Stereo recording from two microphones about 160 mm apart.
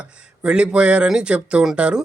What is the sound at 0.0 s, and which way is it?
A man's voice, 5° right (ahead or behind).